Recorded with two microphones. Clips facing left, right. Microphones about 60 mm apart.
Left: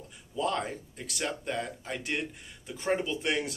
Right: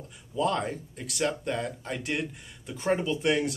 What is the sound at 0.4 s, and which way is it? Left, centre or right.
Speech, centre.